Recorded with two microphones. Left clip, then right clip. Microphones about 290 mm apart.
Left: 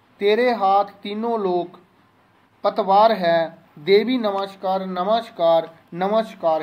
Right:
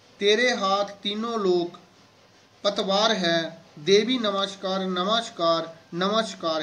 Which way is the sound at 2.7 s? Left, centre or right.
Centre.